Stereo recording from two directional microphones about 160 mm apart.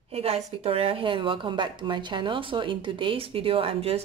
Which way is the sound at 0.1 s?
40° right (ahead or behind).